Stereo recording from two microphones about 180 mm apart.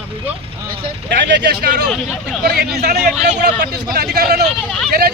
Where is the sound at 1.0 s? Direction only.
75° right (ahead or behind).